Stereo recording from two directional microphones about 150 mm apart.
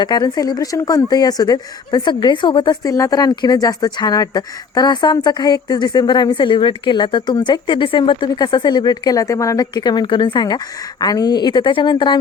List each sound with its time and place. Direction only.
0.0 s speech: 25° left (ahead or behind)